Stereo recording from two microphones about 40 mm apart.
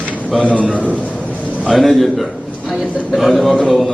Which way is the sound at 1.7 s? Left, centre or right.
Centre.